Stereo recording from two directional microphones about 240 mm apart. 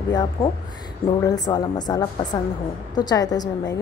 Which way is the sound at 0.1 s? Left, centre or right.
Centre.